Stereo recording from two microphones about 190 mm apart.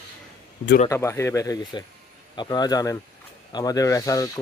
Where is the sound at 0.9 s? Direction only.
15° left (ahead or behind).